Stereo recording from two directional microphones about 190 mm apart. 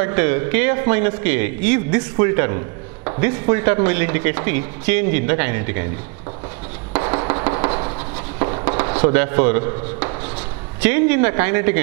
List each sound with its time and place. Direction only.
0.0 s speech: 15° right (ahead or behind)
7.1 s music: 25° right (ahead or behind)
8.4 s a sound: 25° right (ahead or behind)
9.0 s speech: 15° right (ahead or behind)